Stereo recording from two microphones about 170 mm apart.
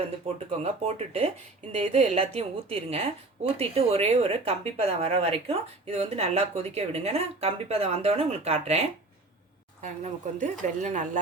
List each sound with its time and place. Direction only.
0.3 s a woman's voice: 40° right (ahead or behind)